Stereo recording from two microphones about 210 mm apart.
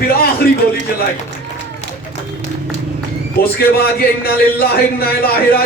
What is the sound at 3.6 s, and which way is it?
A man's voice, 45° left (ahead or behind).